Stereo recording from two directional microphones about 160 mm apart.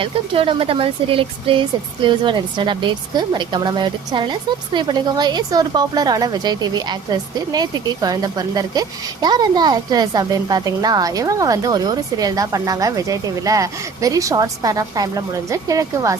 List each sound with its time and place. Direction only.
0.0 s speech: 35° right (ahead or behind)